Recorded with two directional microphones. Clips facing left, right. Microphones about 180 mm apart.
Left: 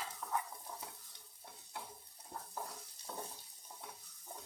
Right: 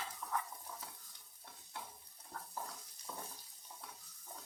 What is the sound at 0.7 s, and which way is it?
Stir, 15° left (ahead or behind).